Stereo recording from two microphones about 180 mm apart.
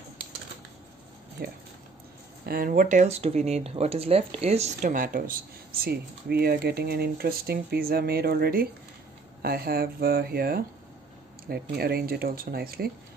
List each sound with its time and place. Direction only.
1.4 s speech: 60° right (ahead or behind); by 4.7 s 35° right (ahead or behind)
4.8 s speech: 50° right (ahead or behind)